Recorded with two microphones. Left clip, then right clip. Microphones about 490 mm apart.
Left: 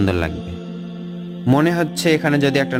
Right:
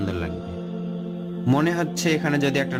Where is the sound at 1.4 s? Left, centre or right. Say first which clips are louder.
Left 5 dB; centre.